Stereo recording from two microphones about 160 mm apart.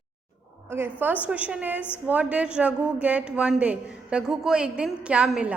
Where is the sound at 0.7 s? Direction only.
15° right (ahead or behind).